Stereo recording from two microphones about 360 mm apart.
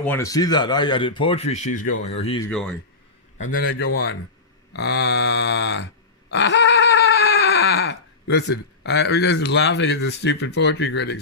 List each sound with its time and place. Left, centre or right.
0.0 s speech: centre
2.4 s speech: centre
3.3 s a sound: left
6.3 s screaming: left